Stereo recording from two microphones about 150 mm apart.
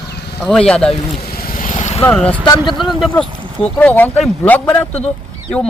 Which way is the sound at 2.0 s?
10° left (ahead or behind).